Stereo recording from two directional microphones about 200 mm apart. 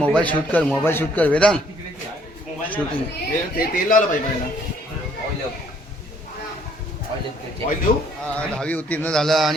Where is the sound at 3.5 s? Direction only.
45° left (ahead or behind).